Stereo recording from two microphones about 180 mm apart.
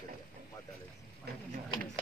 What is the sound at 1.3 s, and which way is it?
Speech, 60° right (ahead or behind).